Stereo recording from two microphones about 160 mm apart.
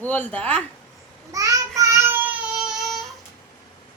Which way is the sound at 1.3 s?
20° right (ahead or behind).